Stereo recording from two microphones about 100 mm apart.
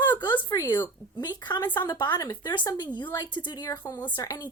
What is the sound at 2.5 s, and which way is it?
Speech, 50° left (ahead or behind).